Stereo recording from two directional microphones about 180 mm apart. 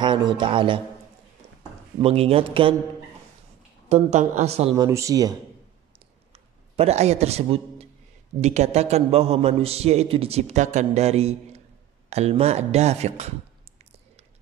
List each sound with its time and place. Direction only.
0.0 s speech: 25° right (ahead or behind)
2.0 s a man's voice: 35° right (ahead or behind)
3.9 s a man's voice: 40° right (ahead or behind)
4.7 s speech: 20° right (ahead or behind)
5.9 s a sound: 35° right (ahead or behind)
8.4 s a man's voice: 40° right (ahead or behind)